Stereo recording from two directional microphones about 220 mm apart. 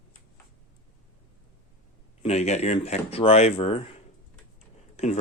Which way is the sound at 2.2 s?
30° left (ahead or behind).